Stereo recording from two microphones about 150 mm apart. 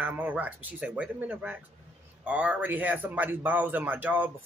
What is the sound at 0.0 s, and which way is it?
Speech, 10° right (ahead or behind).